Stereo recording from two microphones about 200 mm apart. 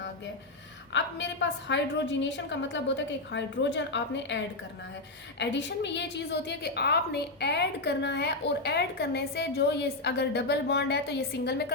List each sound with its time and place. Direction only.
0.9 s a woman's voice: 65° left (ahead or behind)